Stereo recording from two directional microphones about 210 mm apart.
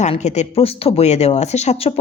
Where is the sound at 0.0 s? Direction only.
35° left (ahead or behind).